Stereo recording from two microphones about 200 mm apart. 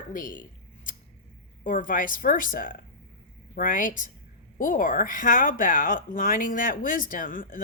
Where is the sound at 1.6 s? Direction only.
40° left (ahead or behind).